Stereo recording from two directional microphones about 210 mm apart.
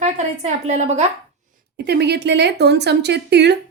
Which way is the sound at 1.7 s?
50° right (ahead or behind).